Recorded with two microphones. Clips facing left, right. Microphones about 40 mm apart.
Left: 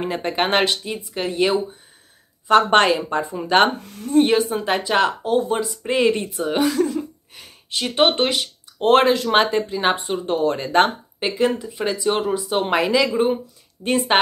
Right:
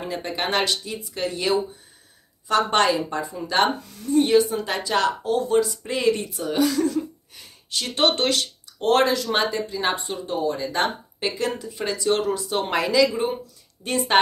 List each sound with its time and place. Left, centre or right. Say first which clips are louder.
0.0 s a woman's voice: left 5 dB; left
8.8 s a woman's voice: left 4 dB; left
10.2 s speech: left 4 dB; left
11.1 s speech: left 7 dB; left